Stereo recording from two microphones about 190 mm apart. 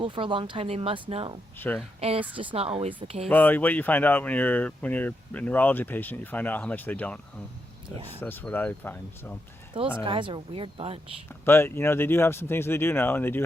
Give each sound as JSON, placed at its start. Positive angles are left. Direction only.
{"t": 0.0, "sound": "speech", "side_deg": -25}
{"t": 1.5, "sound": "speech", "side_deg": 10}
{"t": 2.0, "sound": "speech", "side_deg": -30}
{"t": 3.2, "sound": "speech", "side_deg": 10}
{"t": 8.2, "sound": "speech", "side_deg": 10}
{"t": 10.0, "sound": "speech", "side_deg": -25}
{"t": 11.3, "sound": "speech", "side_deg": 10}